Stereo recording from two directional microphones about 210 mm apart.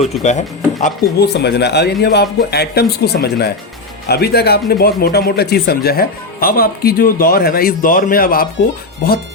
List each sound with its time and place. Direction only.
0.0 s speech: 35° left (ahead or behind)
1.3 s speech: 55° left (ahead or behind)